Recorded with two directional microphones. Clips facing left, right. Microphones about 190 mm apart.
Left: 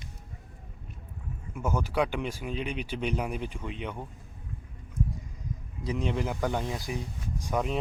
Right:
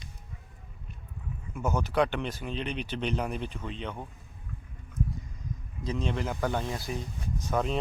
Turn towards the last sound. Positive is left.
turn(degrees=10)  # may be behind; listen again after turning